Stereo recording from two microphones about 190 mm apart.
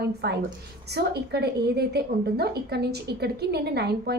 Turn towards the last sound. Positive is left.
turn(degrees=-60)  # may be behind; listen again after turning